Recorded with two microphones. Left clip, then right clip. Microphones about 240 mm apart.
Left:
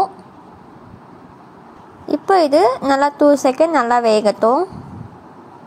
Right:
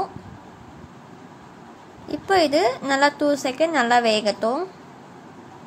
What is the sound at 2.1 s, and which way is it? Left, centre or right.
A woman's voice, centre.